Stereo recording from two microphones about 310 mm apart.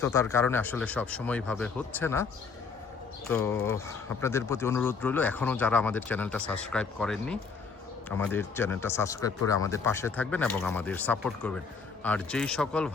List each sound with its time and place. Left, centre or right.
0.0 s speech: centre
3.2 s speech: centre